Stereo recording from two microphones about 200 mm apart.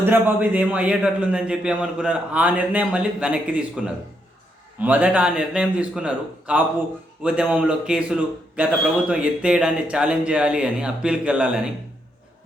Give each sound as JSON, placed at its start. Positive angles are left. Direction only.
{"t": 0.0, "sound": "a man's voice", "side_deg": -10}